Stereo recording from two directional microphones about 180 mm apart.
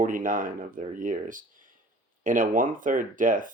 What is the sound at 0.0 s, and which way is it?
Speech, 45° right (ahead or behind).